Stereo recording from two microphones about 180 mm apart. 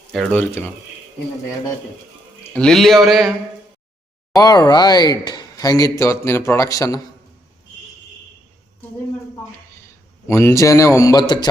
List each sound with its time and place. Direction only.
0.1 s speech: centre (ahead or behind)
2.5 s speech: 5° left (ahead or behind)
4.4 s speech: 20° left (ahead or behind)
10.2 s a man's voice: 15° left (ahead or behind)